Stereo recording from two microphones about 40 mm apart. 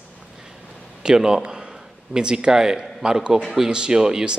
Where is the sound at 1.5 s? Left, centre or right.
Centre.